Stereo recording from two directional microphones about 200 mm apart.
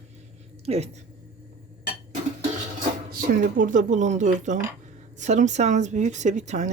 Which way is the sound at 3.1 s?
45° right (ahead or behind).